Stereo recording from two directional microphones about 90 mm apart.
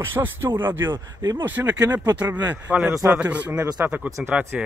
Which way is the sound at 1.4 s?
20° right (ahead or behind).